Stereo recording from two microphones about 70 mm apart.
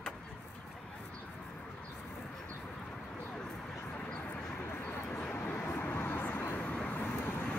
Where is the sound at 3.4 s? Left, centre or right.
Centre.